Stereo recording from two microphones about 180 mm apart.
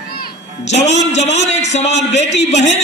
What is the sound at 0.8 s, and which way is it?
Speech, 35° left (ahead or behind).